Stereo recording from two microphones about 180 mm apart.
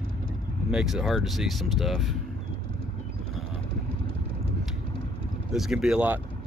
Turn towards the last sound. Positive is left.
turn(degrees=-5)  # may be behind; listen again after turning